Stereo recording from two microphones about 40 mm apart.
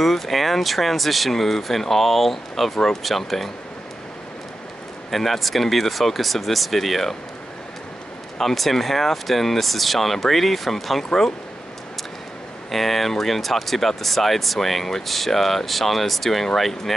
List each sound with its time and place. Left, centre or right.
0.0 s speech: centre
5.1 s speech: centre
8.4 s speech: centre
12.7 s speech: centre